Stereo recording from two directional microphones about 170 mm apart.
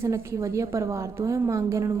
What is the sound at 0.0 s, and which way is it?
A woman's voice, 15° right (ahead or behind).